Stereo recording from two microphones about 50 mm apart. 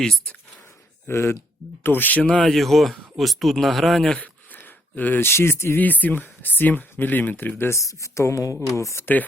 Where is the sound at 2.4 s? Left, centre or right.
Centre.